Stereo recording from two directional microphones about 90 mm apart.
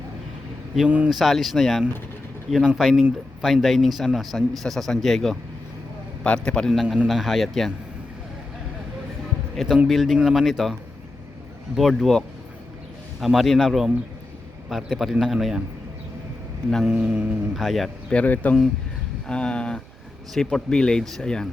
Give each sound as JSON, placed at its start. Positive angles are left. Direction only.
{"t": 0.9, "sound": "speech", "side_deg": -15}
{"t": 1.1, "sound": "speech", "side_deg": 0}
{"t": 6.8, "sound": "speech", "side_deg": -10}
{"t": 9.7, "sound": "speech", "side_deg": -5}
{"t": 11.8, "sound": "speech", "side_deg": 0}
{"t": 16.8, "sound": "speech", "side_deg": -10}
{"t": 17.5, "sound": "speech", "side_deg": 0}
{"t": 18.1, "sound": "speech", "side_deg": 15}